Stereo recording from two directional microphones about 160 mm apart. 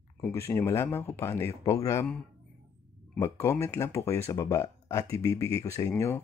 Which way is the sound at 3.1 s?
15° left (ahead or behind).